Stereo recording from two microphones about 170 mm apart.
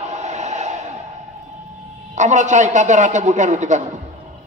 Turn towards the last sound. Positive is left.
turn(degrees=-45)  # may be behind; listen again after turning